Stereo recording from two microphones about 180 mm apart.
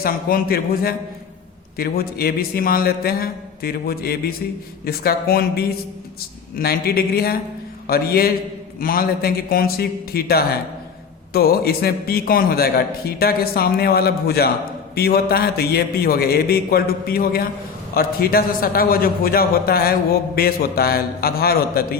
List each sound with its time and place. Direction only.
0.0 s a man's voice: 55° left (ahead or behind)